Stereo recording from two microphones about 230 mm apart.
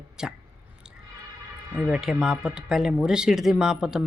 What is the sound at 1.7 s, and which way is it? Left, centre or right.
Speech, centre.